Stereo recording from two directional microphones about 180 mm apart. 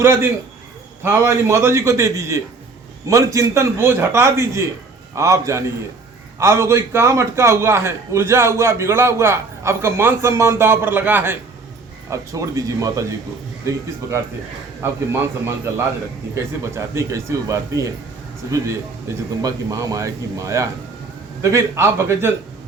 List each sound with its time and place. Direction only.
0.0 s a man's voice: 15° right (ahead or behind)